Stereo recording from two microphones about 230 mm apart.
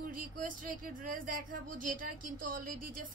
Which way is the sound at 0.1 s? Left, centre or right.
Right.